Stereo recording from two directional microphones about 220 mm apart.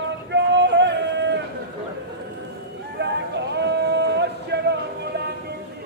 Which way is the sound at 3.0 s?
50° right (ahead or behind).